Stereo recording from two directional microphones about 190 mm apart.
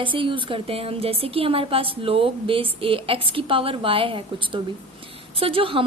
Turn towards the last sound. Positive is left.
turn(degrees=-30)  # may be behind; listen again after turning